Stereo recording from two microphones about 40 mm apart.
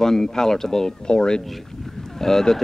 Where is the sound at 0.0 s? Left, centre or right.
Centre.